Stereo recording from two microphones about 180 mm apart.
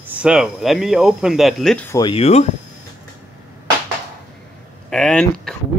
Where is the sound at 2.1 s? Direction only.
35° left (ahead or behind).